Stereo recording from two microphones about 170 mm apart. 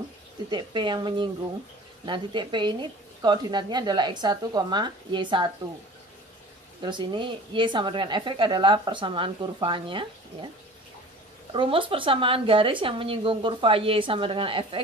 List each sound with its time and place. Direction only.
0.5 s a woman's voice: 25° right (ahead or behind)
6.8 s a woman's voice: 25° right (ahead or behind)
11.5 s speech: 30° right (ahead or behind)